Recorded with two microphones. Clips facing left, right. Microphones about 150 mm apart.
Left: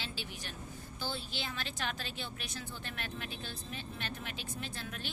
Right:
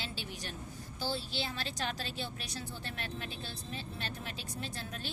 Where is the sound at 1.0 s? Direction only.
35° right (ahead or behind).